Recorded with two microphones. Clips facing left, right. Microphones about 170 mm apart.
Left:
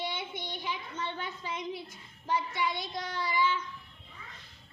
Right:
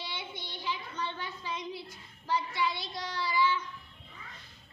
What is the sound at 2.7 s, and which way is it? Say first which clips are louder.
Child singing: left 3 dB; 50° left (ahead or behind).